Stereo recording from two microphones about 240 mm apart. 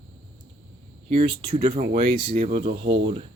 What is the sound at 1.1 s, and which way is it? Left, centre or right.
Speech, right.